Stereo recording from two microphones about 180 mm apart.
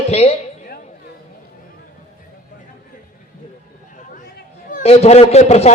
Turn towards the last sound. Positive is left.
turn(degrees=35)  # may be behind; listen again after turning